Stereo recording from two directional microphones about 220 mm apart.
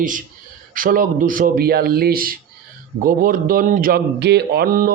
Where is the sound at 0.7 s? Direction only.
40° right (ahead or behind).